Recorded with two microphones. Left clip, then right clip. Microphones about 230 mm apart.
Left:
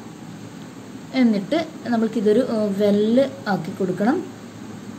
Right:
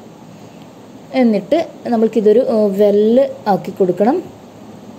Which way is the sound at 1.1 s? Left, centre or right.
Right.